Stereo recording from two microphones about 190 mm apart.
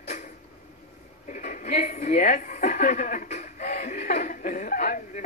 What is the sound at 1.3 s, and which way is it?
A woman's voice, 40° left (ahead or behind).